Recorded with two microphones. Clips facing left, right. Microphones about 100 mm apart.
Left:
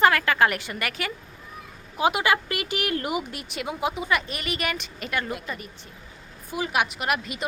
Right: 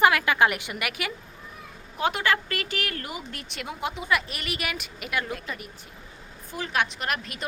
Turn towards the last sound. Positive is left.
turn(degrees=5)  # may be behind; listen again after turning